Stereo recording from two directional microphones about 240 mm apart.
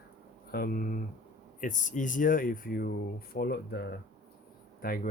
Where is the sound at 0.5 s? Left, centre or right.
Left.